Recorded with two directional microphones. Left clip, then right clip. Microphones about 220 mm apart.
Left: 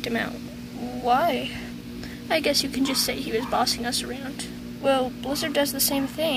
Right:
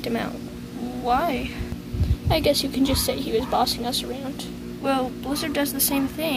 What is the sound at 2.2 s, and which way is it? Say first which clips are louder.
Speech: right 2 dB; 5° left (ahead or behind).